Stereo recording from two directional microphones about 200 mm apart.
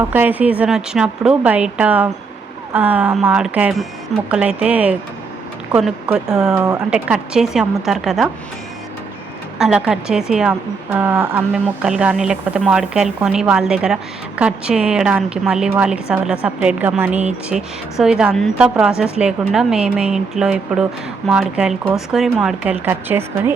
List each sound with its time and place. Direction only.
0.1 s a woman's voice: 10° right (ahead or behind)
6.5 s a woman's voice: 15° right (ahead or behind)
6.9 s speech: 5° right (ahead or behind)
9.6 s speech: 5° right (ahead or behind)